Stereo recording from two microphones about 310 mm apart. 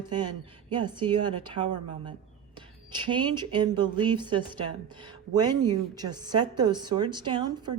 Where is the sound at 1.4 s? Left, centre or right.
Centre.